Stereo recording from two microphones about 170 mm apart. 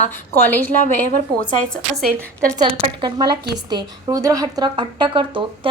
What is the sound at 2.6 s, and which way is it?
Speech, 25° right (ahead or behind).